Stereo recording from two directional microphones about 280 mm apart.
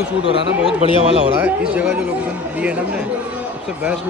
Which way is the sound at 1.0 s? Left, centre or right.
Right.